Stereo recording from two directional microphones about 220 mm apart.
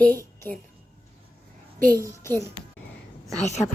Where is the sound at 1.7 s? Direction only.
40° right (ahead or behind).